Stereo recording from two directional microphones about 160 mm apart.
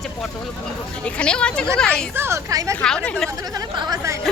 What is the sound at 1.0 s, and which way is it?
A woman's voice, 5° left (ahead or behind).